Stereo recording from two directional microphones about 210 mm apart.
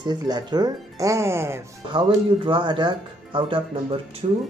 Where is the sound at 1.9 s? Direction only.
25° right (ahead or behind).